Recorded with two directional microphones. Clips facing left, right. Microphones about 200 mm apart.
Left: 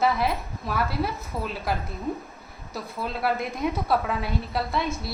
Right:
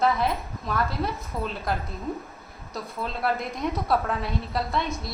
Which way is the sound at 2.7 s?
5° left (ahead or behind).